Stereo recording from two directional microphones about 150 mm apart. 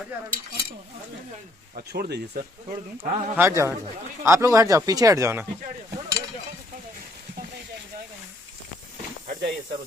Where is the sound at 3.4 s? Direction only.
20° right (ahead or behind).